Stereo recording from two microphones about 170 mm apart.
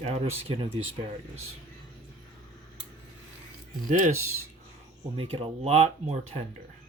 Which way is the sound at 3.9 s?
45° right (ahead or behind).